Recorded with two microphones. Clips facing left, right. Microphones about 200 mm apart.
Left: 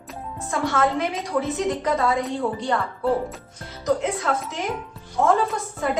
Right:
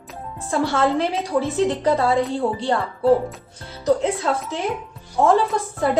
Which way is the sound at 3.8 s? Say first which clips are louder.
Right 4 dB; 30° right (ahead or behind).